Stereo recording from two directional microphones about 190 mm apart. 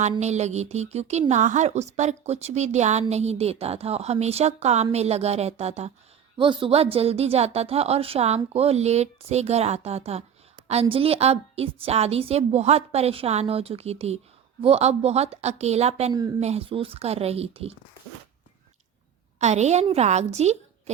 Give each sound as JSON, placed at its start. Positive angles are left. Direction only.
{"t": 0.2, "sound": "a woman's voice", "side_deg": -35}
{"t": 19.4, "sound": "a woman's voice", "side_deg": -35}